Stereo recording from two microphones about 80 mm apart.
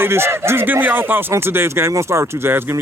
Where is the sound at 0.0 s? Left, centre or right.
Right.